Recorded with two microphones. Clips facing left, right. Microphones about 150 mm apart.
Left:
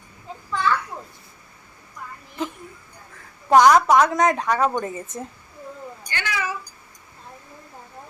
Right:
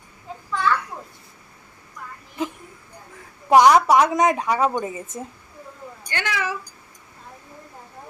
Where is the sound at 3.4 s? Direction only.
10° right (ahead or behind).